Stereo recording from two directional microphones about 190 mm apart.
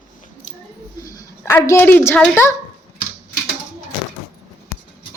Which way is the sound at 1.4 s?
15° left (ahead or behind).